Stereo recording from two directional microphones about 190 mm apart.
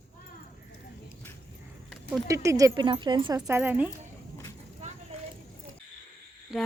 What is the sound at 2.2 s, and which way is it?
Speech, 15° right (ahead or behind).